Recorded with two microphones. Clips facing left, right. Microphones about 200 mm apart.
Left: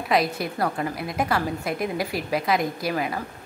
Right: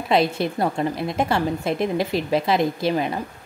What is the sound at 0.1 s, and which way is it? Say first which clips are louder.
A woman's voice: right 4 dB; 25° right (ahead or behind).